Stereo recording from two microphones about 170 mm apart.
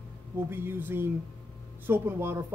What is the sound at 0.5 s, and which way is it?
Speech, 15° right (ahead or behind).